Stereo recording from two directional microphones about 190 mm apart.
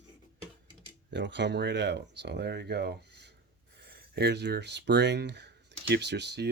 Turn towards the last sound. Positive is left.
turn(degrees=-60)  # may be behind; listen again after turning